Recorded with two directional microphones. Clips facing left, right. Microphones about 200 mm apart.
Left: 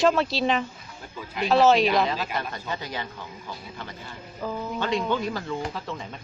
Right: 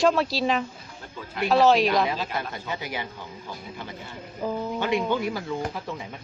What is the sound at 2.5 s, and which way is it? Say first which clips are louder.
Speech: even; 20° right (ahead or behind).